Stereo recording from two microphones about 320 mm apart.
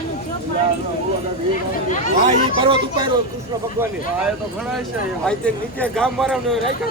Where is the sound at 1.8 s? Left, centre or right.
Left.